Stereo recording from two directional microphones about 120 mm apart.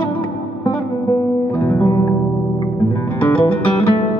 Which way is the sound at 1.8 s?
35° left (ahead or behind).